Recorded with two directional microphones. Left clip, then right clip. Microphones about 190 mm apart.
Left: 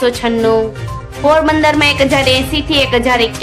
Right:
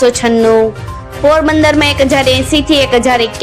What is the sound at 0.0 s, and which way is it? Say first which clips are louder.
A woman's voice: right 4 dB; 25° right (ahead or behind).